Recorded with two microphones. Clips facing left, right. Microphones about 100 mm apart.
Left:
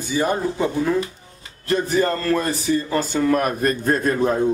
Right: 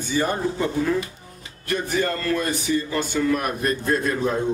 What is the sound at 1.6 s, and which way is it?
A man's voice, 30° left (ahead or behind).